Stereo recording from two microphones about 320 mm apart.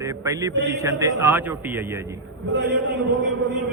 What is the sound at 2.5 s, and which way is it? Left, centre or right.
Speech, right.